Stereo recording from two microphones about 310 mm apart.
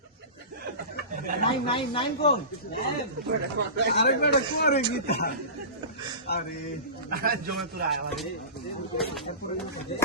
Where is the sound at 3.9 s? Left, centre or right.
Left.